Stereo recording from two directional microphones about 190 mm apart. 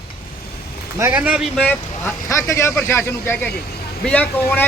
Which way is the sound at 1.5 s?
10° left (ahead or behind).